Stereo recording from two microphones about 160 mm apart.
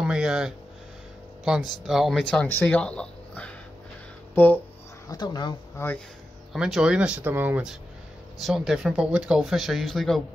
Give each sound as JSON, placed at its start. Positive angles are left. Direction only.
{"t": 0.0, "sound": "music", "side_deg": -5}
{"t": 1.4, "sound": "speech", "side_deg": -5}
{"t": 2.4, "sound": "speech", "side_deg": 10}
{"t": 5.0, "sound": "speech", "side_deg": 25}
{"t": 6.5, "sound": "speech", "side_deg": -5}